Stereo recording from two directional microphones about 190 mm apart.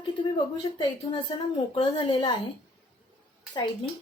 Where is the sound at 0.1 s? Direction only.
25° left (ahead or behind).